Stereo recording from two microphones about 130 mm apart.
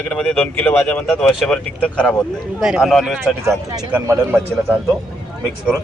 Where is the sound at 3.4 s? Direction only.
20° right (ahead or behind).